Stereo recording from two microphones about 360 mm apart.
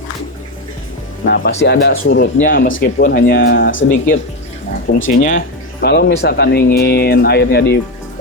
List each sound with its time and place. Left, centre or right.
1.2 s speech: left
5.0 s speech: left